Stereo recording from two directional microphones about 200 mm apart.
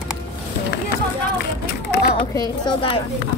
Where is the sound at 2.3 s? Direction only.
25° left (ahead or behind).